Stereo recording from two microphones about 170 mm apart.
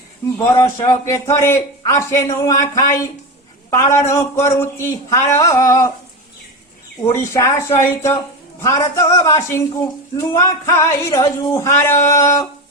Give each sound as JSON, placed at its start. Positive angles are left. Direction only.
{"t": 0.3, "sound": "a man's voice", "side_deg": 15}
{"t": 7.1, "sound": "a man's voice", "side_deg": 15}